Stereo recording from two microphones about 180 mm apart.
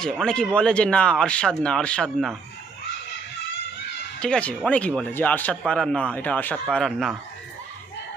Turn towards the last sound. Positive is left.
turn(degrees=0)  # may be behind; listen again after turning